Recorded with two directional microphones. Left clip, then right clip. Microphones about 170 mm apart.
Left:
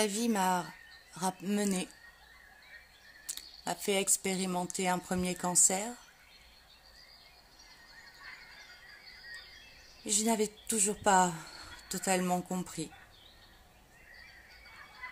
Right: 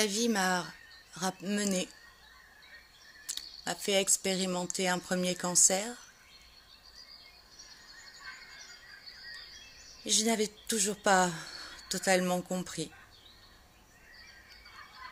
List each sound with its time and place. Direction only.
0.0 s a woman's voice: 10° left (ahead or behind)
3.3 s speech: 15° left (ahead or behind)
8.2 s a sound: 35° right (ahead or behind)
10.0 s speech: 10° left (ahead or behind)